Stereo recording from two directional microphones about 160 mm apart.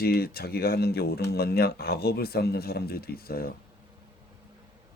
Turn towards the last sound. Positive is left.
turn(degrees=75)  # may be behind; listen again after turning